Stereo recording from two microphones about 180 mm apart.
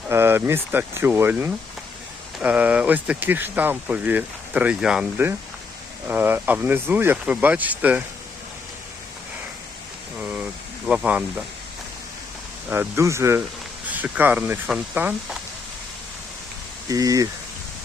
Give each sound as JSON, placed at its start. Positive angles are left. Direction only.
{"t": 0.1, "sound": "speech", "side_deg": -15}
{"t": 10.2, "sound": "a sound", "side_deg": -10}
{"t": 10.8, "sound": "speech", "side_deg": -5}
{"t": 12.7, "sound": "speech", "side_deg": -15}
{"t": 16.9, "sound": "speech", "side_deg": -20}